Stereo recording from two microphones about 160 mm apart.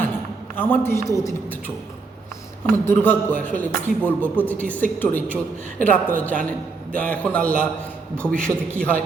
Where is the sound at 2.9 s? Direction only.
10° left (ahead or behind).